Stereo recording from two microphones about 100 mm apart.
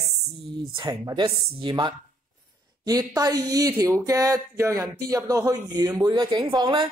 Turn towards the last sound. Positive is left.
turn(degrees=-45)  # may be behind; listen again after turning